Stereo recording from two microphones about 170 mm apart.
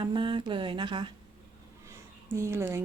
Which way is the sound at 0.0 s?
30° right (ahead or behind).